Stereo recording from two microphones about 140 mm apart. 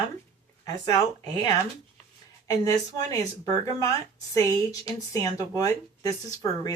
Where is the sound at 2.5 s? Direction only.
25° left (ahead or behind).